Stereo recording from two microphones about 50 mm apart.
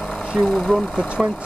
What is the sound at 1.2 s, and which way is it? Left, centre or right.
Speech, centre.